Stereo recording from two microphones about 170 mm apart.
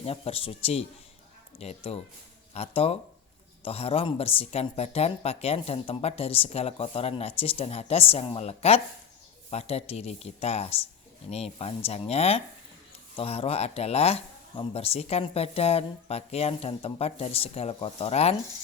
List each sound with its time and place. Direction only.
0.0 s speech: 35° left (ahead or behind)